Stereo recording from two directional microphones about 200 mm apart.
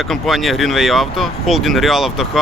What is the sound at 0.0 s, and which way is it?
Speech, centre (ahead or behind).